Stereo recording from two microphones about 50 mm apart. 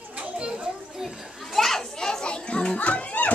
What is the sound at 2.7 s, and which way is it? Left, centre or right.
Music, left.